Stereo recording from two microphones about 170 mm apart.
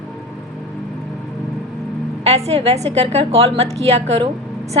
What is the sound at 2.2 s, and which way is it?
A woman's voice, 40° right (ahead or behind).